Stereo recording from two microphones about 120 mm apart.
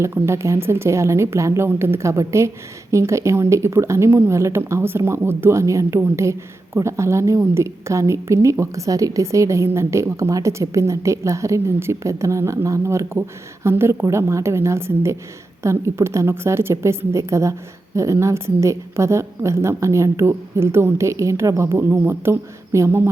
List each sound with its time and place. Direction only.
0.0 s a woman's voice: 20° right (ahead or behind)